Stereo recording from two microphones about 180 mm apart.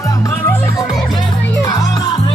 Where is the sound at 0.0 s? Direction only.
20° left (ahead or behind).